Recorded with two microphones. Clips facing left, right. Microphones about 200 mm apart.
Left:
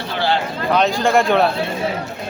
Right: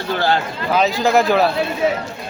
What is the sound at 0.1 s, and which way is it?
Speech, 45° right (ahead or behind).